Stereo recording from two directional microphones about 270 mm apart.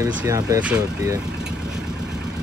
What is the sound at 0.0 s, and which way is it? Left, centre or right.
Speech, centre.